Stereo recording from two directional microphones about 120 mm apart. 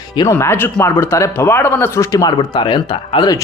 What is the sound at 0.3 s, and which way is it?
Speech, 20° left (ahead or behind).